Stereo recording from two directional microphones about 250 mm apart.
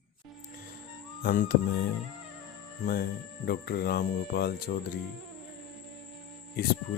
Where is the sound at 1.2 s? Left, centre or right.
Left.